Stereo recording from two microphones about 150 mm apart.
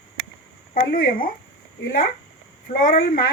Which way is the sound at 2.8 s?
70° left (ahead or behind).